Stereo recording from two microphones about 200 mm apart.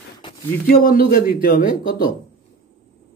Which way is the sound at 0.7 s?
45° left (ahead or behind).